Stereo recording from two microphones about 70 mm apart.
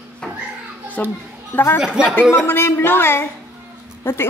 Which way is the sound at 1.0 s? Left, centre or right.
Left.